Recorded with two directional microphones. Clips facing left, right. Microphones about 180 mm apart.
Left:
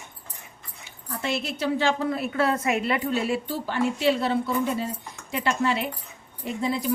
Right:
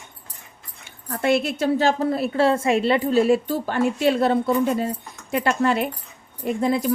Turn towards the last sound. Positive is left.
turn(degrees=-50)  # may be behind; listen again after turning